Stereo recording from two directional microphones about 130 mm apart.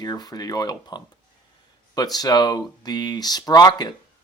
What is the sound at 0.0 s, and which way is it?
Speech, 30° left (ahead or behind).